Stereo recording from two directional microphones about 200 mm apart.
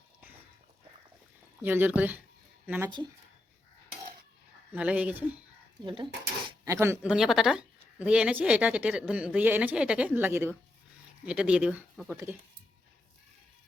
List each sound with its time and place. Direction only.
1.6 s speech: 10° right (ahead or behind)
4.7 s speech: 5° right (ahead or behind)
5.8 s speech: 25° right (ahead or behind)
6.7 s speech: 15° right (ahead or behind)